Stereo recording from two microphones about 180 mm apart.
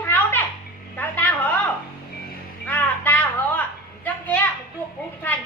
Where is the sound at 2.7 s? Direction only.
10° left (ahead or behind).